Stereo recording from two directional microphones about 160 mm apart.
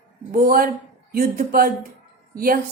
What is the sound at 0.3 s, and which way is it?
A woman's voice, 65° right (ahead or behind).